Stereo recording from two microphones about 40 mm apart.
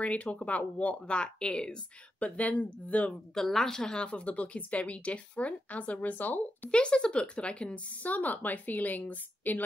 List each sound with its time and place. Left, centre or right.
0.0 s a woman's voice: left
2.2 s a woman's voice: left
3.3 s speech: centre
4.0 s a woman's voice: left
6.7 s a woman's voice: left
8.1 s speech: left